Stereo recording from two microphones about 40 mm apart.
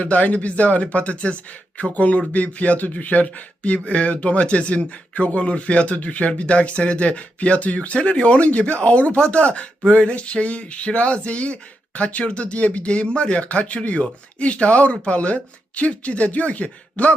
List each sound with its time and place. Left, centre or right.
0.0 s speech: left